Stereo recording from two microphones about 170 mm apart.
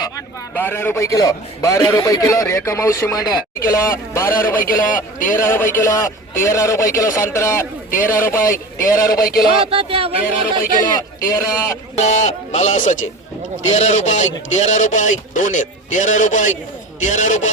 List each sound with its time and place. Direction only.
0.5 s a man's voice: 10° left (ahead or behind)
3.6 s a man's voice: 55° left (ahead or behind)
5.4 s a man's voice: 15° left (ahead or behind)
8.8 s a man's voice: 55° left (ahead or behind)
9.6 s speech: 35° right (ahead or behind)
10.9 s a man's voice: 20° left (ahead or behind)
11.9 s speech: 45° left (ahead or behind)